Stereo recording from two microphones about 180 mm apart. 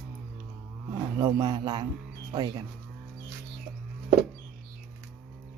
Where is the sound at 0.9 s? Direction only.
20° right (ahead or behind).